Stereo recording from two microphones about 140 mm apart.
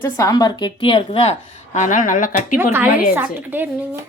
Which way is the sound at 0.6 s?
35° left (ahead or behind).